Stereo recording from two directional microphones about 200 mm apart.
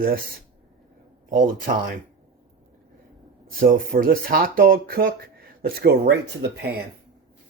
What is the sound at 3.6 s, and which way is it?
Speech, 45° right (ahead or behind).